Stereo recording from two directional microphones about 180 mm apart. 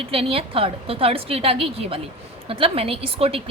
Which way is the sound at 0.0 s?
30° right (ahead or behind).